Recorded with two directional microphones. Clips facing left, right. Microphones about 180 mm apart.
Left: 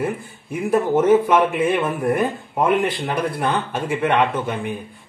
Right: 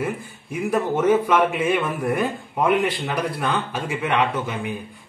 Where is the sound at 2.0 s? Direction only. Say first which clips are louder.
Left 3 dB; 50° left (ahead or behind).